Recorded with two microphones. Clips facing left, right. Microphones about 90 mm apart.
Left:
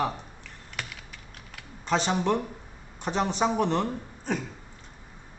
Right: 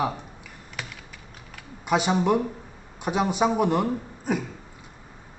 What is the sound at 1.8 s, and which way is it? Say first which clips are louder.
A man's voice: right 3 dB; 10° right (ahead or behind).